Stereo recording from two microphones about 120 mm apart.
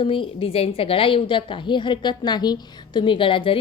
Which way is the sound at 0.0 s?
50° left (ahead or behind).